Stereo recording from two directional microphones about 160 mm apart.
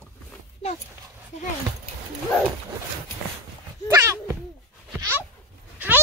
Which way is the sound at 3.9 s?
20° right (ahead or behind).